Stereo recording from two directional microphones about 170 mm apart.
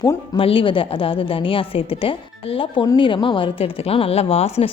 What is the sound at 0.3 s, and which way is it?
A woman's voice, 30° left (ahead or behind).